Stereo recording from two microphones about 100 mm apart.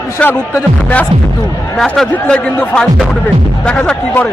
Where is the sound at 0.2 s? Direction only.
20° left (ahead or behind).